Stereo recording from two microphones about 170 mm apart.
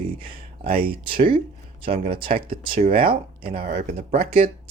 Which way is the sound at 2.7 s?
55° right (ahead or behind).